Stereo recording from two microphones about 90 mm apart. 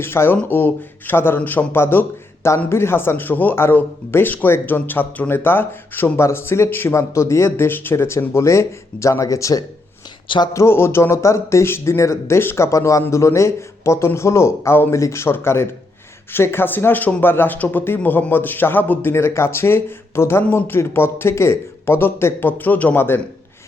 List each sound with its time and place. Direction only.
0.0 s a man's voice: 25° left (ahead or behind)
10.2 s speech: 60° left (ahead or behind)
10.5 s speech: 30° left (ahead or behind)